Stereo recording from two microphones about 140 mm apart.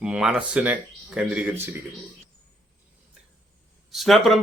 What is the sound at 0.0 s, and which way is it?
Speech, 5° right (ahead or behind).